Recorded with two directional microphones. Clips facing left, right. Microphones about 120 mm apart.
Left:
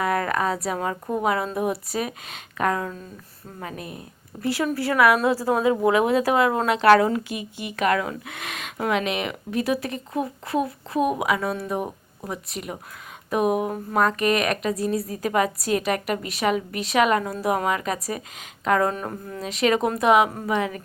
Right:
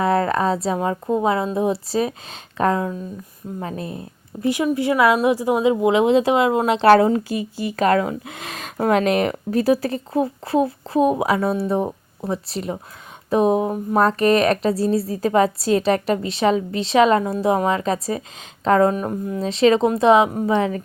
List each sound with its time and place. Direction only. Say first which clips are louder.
0.0 s a woman's voice: right 5 dB; 30° right (ahead or behind)
4.4 s a woman's voice: right 5 dB; 20° right (ahead or behind)